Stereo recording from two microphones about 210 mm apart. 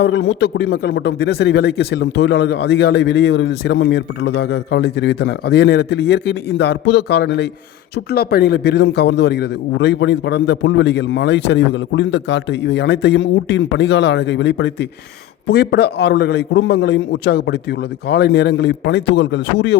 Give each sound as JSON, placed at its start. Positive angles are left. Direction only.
{"t": 0.0, "sound": "a man's voice", "side_deg": 55}